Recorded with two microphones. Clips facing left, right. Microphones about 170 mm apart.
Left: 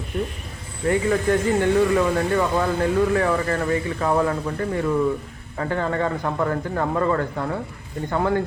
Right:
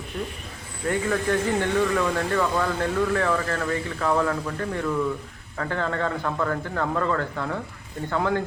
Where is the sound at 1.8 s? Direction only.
15° left (ahead or behind).